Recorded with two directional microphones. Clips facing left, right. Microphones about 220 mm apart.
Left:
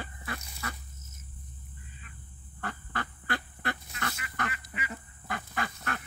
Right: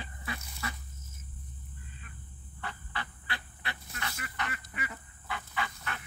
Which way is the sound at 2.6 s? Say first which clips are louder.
Left 4 dB; 50° left (ahead or behind).